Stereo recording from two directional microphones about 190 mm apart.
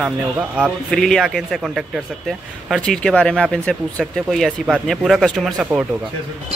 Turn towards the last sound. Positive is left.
turn(degrees=-5)  # may be behind; listen again after turning